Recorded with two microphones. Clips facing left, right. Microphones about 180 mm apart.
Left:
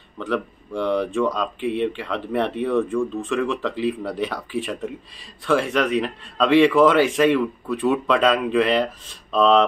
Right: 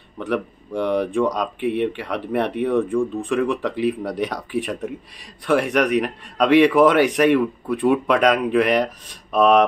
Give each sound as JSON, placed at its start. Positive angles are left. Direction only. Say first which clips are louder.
{"t": 0.2, "sound": "speech", "louder": "right 1 dB", "side_deg": -15}